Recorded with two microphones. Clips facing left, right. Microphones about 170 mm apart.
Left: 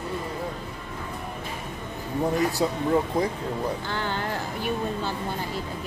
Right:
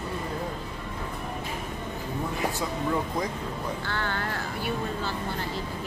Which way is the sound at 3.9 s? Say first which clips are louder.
Left 2 dB; 15° left (ahead or behind).